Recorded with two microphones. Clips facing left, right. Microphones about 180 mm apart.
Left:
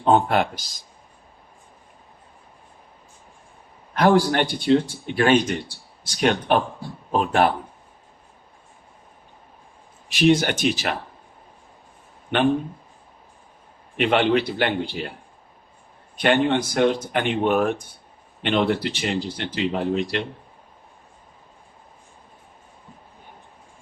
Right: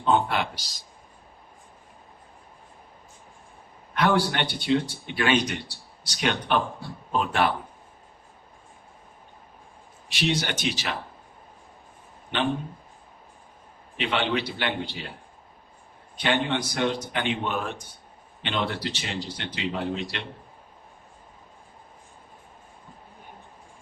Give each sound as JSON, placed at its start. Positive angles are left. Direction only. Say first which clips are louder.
{"t": 0.0, "sound": "speech", "louder": "left 5 dB", "side_deg": 45}
{"t": 3.9, "sound": "speech", "louder": "left 6 dB", "side_deg": 40}
{"t": 10.1, "sound": "speech", "louder": "left 9 dB", "side_deg": 50}
{"t": 13.9, "sound": "speech", "louder": "left 7 dB", "side_deg": 55}
{"t": 16.2, "sound": "speech", "louder": "left 6 dB", "side_deg": 50}